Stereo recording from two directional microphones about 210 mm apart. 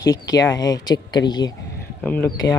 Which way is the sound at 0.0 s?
15° left (ahead or behind).